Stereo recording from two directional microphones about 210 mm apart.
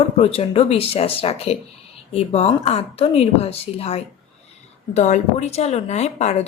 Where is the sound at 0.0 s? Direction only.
30° left (ahead or behind).